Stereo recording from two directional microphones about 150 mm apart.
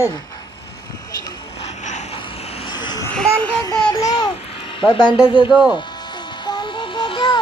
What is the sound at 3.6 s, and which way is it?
Music, 25° left (ahead or behind).